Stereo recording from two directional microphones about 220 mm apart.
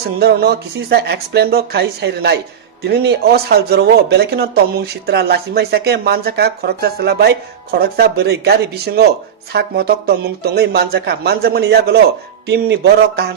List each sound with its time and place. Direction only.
0.2 s speech: 45° right (ahead or behind)